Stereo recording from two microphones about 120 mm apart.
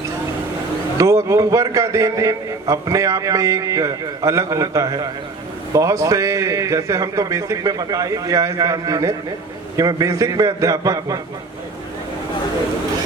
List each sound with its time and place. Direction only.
0.9 s a man's voice: 25° right (ahead or behind)